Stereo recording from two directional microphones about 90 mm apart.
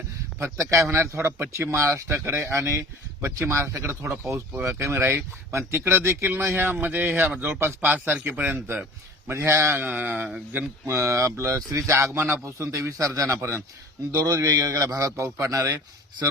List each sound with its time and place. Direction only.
0.6 s a man's voice: 30° right (ahead or behind)